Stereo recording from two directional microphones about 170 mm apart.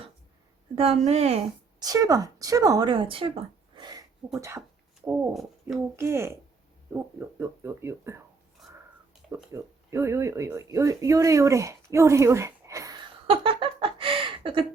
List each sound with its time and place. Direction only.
0.8 s a woman's voice: 40° right (ahead or behind)
1.8 s speech: 20° right (ahead or behind)
3.8 s a sound: 25° right (ahead or behind)
4.4 s speech: 15° right (ahead or behind)
9.3 s speech: 15° right (ahead or behind)
13.2 s a sound: 30° right (ahead or behind)